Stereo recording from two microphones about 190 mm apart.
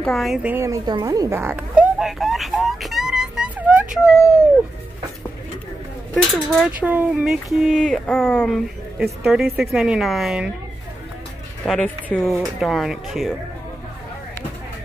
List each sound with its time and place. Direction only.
0.0 s speech: centre (ahead or behind)
6.5 s speech: 5° right (ahead or behind)
11.6 s speech: 5° left (ahead or behind)